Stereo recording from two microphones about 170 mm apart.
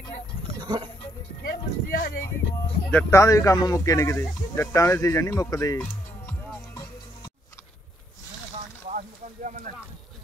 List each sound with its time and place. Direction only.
1.4 s music: 55° left (ahead or behind)
2.9 s speech: 15° left (ahead or behind)
8.8 s a sound: 45° right (ahead or behind)